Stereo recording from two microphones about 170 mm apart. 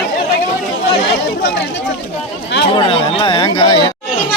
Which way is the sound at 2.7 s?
30° left (ahead or behind).